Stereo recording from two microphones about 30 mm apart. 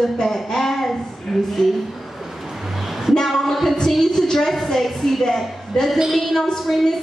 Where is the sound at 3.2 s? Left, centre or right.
Centre.